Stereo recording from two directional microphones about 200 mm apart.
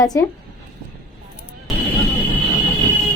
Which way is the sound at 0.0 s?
20° left (ahead or behind).